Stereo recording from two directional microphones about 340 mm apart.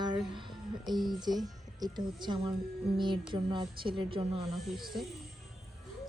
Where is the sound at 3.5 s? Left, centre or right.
Centre.